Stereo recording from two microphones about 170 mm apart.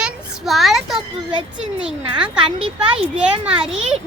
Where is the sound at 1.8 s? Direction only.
5° right (ahead or behind).